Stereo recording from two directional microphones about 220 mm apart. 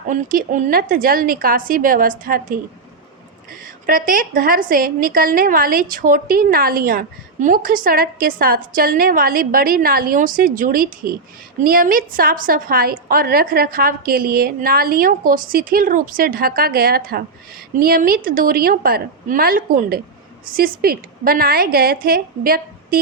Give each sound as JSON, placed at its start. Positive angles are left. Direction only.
{"t": 0.1, "sound": "a woman's voice", "side_deg": -35}
{"t": 3.6, "sound": "a woman's voice", "side_deg": -40}